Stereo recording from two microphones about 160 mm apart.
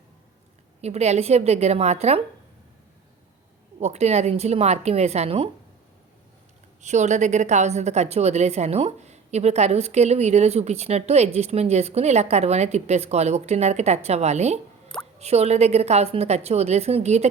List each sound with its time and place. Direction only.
0.8 s a woman's voice: 40° right (ahead or behind)
3.8 s a woman's voice: 40° right (ahead or behind)
6.8 s a woman's voice: 45° right (ahead or behind)